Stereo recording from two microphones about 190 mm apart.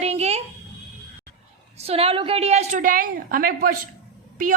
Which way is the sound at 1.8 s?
30° right (ahead or behind).